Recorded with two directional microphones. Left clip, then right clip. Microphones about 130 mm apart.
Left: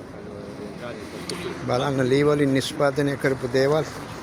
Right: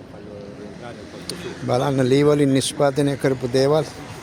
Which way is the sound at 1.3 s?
35° right (ahead or behind).